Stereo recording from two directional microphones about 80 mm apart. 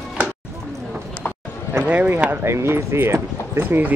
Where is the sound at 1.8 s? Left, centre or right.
Centre.